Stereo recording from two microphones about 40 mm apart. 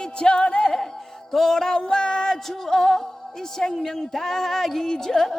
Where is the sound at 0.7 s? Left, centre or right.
Centre.